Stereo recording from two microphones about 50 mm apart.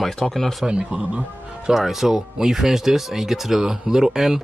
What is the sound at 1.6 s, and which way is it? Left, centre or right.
Speech, centre.